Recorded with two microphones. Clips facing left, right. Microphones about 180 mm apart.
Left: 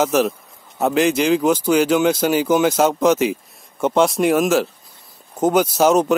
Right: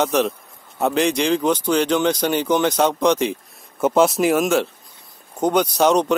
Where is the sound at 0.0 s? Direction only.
Centre (ahead or behind).